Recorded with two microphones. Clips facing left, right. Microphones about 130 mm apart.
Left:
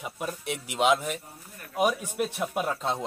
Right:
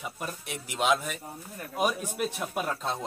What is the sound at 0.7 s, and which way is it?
Speech, 15° left (ahead or behind).